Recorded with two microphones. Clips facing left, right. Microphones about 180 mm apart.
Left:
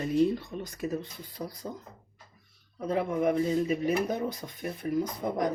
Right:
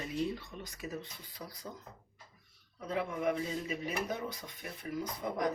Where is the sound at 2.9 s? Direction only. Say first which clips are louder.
Left 7 dB; 45° left (ahead or behind).